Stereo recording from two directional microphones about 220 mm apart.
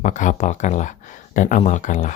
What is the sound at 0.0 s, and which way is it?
Speech, 35° left (ahead or behind).